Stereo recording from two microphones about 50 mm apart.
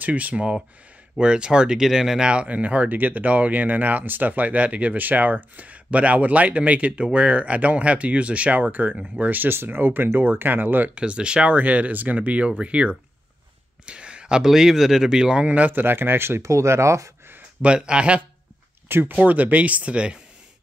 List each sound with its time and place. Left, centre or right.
0.0 s speech: right
11.0 s speech: right
15.4 s speech: right
16.4 s speech: right
17.6 s speech: right
18.9 s speech: right
19.2 s speech: right